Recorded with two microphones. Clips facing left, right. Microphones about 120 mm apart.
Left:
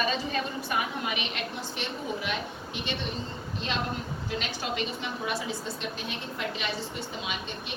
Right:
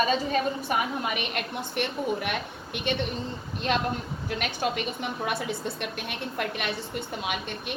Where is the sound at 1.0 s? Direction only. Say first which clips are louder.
Right 2 dB; 50° right (ahead or behind).